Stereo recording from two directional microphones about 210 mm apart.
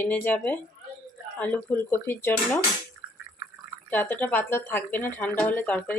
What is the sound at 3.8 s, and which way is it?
Speech, 10° left (ahead or behind).